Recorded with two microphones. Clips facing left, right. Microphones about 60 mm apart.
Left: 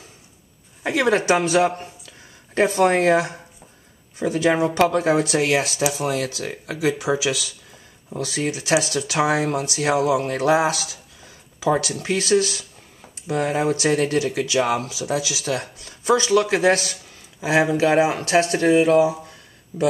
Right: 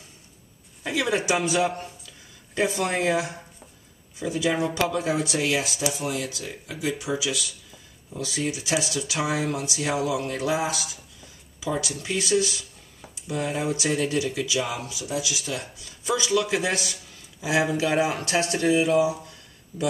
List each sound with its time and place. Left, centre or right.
0.8 s speech: left
1.7 s speech: centre
2.5 s speech: left
8.2 s speech: left
11.7 s speech: left
14.9 s speech: left